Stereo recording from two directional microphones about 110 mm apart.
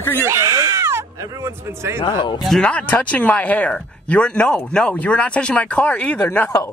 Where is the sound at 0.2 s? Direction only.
25° right (ahead or behind).